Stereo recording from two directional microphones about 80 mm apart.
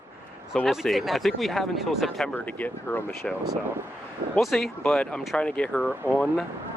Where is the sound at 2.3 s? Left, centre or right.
Left.